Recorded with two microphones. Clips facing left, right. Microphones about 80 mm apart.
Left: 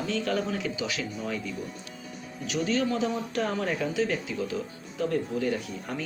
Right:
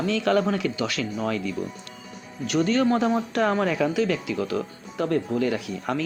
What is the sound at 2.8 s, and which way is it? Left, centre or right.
Speech, right.